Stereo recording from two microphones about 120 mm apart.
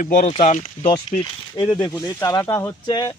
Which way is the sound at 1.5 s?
40° left (ahead or behind).